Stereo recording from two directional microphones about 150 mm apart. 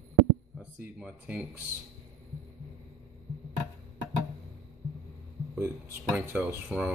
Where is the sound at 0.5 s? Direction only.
5° right (ahead or behind).